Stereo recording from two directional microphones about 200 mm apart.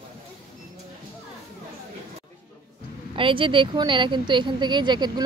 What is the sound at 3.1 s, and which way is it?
Speech, 25° right (ahead or behind).